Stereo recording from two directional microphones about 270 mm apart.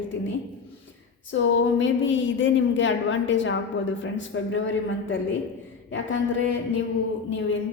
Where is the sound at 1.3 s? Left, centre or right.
Left.